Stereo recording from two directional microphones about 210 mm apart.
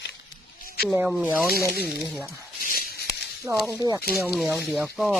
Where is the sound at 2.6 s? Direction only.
45° left (ahead or behind).